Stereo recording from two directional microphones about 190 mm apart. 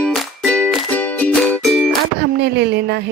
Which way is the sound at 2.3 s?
60° right (ahead or behind).